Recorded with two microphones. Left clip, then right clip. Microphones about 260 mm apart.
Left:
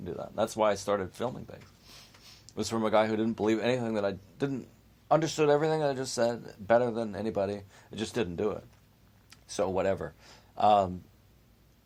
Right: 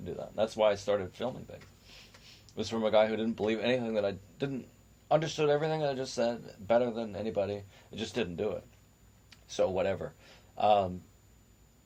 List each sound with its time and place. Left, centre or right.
0.0 s speech: left